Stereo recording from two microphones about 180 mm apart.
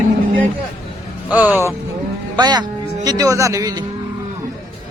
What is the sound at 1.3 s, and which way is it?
Music, 10° right (ahead or behind).